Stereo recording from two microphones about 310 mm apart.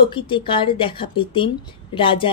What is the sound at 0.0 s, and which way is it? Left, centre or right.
Speech, centre.